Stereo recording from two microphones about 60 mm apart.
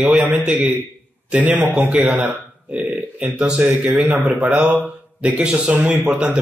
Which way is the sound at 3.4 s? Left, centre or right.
Centre.